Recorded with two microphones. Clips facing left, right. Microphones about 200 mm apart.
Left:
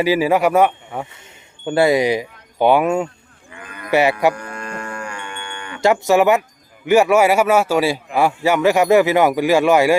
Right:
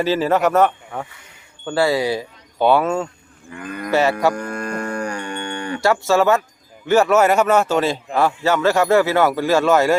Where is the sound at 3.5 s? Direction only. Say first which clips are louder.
Left 1 dB; 45° right (ahead or behind).